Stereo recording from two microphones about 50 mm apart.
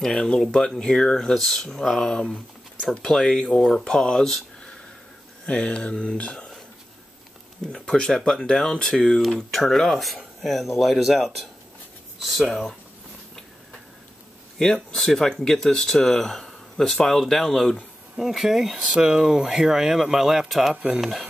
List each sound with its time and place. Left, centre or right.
0.0 s speech: centre
5.5 s speech: left
7.7 s speech: centre
14.6 s speech: centre
18.1 s speech: centre
20.7 s speech: right